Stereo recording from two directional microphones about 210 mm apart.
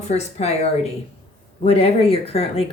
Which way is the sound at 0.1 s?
30° left (ahead or behind).